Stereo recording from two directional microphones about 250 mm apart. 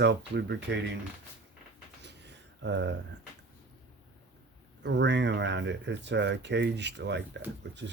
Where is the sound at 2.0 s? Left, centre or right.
Right.